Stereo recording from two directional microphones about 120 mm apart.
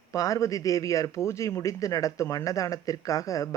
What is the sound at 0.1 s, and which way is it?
A man's voice, 25° left (ahead or behind).